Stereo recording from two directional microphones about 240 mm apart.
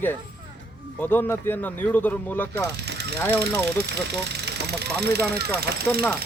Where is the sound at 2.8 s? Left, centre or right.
Right.